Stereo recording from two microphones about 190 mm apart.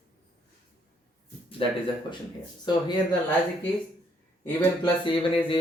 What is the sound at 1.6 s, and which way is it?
Speech, 30° left (ahead or behind).